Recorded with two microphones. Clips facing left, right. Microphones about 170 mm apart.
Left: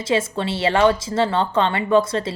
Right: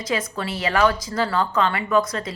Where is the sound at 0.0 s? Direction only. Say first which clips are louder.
Left 5 dB; 25° left (ahead or behind).